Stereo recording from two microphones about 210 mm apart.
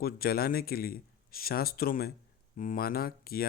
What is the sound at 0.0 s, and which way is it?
A man's voice, 45° left (ahead or behind).